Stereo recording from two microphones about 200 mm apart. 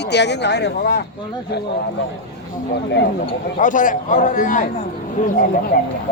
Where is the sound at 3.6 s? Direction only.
40° left (ahead or behind).